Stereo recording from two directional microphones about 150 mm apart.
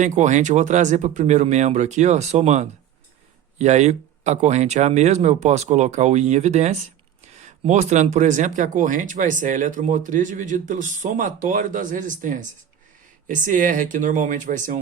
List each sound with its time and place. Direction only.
0.0 s speech: 55° right (ahead or behind)